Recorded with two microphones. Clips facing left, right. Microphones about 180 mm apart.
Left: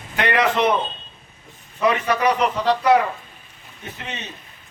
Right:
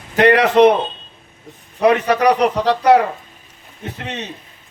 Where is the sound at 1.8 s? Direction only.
65° right (ahead or behind).